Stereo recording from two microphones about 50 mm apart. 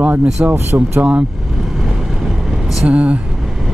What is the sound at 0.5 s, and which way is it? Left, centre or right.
Speech, right.